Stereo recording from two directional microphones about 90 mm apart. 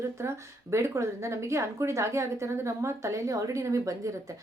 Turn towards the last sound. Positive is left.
turn(degrees=-35)  # may be behind; listen again after turning